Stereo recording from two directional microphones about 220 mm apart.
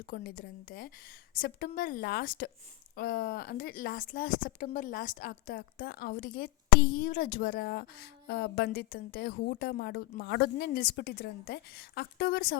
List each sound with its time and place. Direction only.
0.1 s a woman's voice: 40° left (ahead or behind)